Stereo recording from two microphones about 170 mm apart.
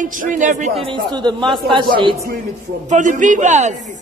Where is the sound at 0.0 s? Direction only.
50° right (ahead or behind).